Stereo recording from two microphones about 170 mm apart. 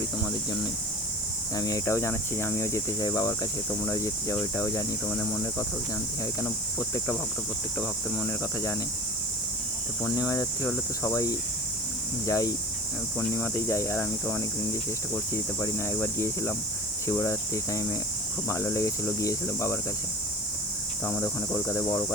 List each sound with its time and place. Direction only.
1.5 s speech: 20° left (ahead or behind)
10.2 s speech: 20° left (ahead or behind)
21.0 s speech: 15° left (ahead or behind)